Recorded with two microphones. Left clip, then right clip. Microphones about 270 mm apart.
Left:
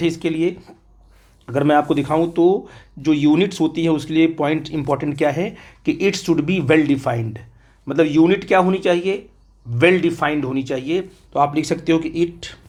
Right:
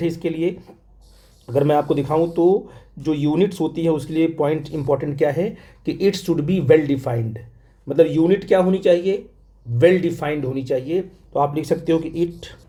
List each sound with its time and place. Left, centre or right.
0.0 s speech: centre